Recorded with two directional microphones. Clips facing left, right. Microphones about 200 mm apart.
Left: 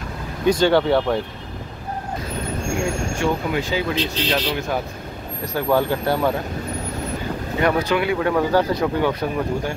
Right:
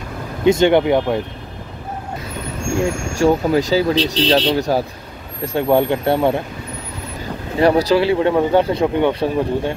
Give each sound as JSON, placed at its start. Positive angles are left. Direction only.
{"t": 0.5, "sound": "speech", "side_deg": -20}
{"t": 2.8, "sound": "speech", "side_deg": -35}
{"t": 7.6, "sound": "speech", "side_deg": -30}